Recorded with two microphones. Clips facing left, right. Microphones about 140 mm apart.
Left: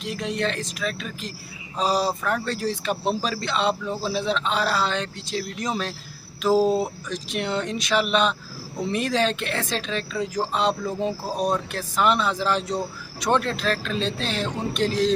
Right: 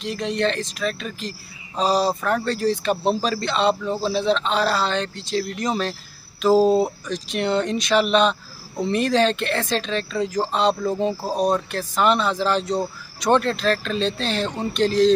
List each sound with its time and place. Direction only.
0.0 s a man's voice: 5° left (ahead or behind)